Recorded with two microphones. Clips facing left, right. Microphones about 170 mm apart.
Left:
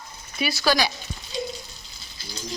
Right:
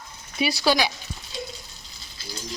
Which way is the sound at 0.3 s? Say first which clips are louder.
Right 1 dB; 20° right (ahead or behind).